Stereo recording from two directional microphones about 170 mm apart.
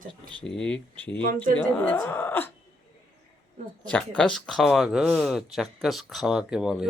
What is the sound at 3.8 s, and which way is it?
Speech, 5° left (ahead or behind).